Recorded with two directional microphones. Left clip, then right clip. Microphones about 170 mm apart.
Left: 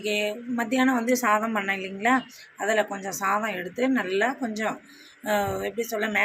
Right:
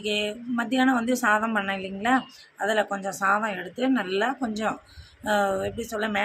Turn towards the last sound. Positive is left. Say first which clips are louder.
# left 2 dB
turn(degrees=-10)  # may be behind; listen again after turning